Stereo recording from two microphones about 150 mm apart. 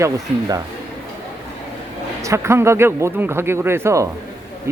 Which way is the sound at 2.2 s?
20° right (ahead or behind).